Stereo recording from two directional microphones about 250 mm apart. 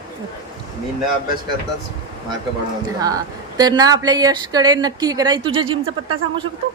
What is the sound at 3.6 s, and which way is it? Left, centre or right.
A woman's voice, centre.